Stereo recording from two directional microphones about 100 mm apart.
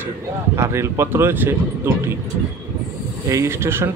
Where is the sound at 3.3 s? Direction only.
30° right (ahead or behind).